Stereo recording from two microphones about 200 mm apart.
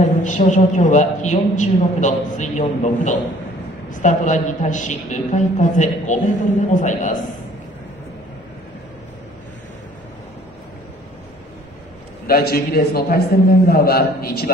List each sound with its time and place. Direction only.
0.2 s a man's voice: 40° left (ahead or behind)
12.3 s a man's voice: 50° left (ahead or behind)